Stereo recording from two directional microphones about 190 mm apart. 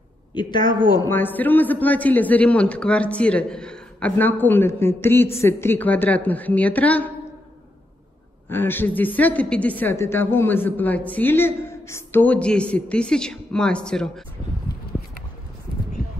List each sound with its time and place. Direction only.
0.3 s a man's voice: 25° left (ahead or behind)
0.9 s a man's voice: 10° left (ahead or behind)
8.5 s a man's voice: 10° left (ahead or behind)